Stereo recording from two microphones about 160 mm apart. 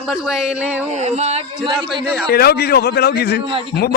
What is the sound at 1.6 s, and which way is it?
Speech, 30° right (ahead or behind).